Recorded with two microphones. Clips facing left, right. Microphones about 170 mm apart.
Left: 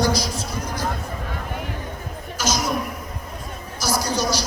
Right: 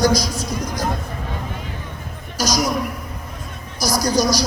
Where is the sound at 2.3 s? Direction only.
40° right (ahead or behind).